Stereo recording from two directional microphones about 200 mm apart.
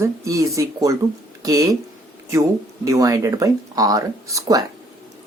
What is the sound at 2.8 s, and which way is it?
Speech, 15° right (ahead or behind).